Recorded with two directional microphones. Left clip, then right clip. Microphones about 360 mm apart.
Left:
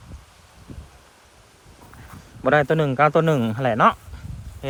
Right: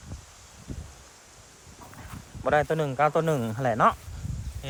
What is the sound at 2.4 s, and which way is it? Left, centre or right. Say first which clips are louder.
A man's voice: left 6 dB; left.